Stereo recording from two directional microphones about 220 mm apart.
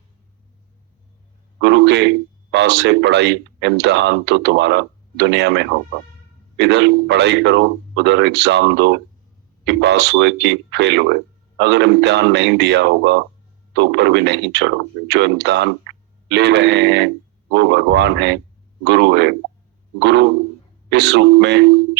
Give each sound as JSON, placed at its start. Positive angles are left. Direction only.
{"t": 1.6, "sound": "speech", "side_deg": -50}